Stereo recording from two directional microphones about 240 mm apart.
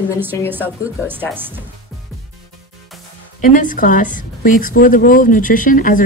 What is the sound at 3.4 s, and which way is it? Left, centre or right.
A woman's voice, left.